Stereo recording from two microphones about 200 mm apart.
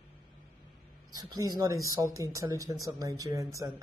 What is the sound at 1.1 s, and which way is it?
Speech, 20° right (ahead or behind).